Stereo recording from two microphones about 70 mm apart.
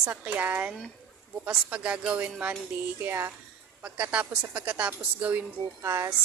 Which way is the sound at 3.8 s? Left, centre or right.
Centre.